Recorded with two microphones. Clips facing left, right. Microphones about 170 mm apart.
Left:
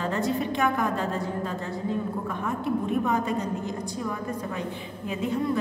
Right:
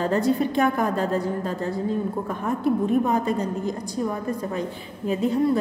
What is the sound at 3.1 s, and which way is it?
A woman's voice, 35° right (ahead or behind).